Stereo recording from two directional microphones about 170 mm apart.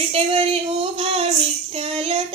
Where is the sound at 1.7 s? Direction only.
35° right (ahead or behind).